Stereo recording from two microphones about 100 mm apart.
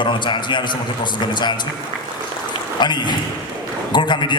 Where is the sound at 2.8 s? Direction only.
50° left (ahead or behind).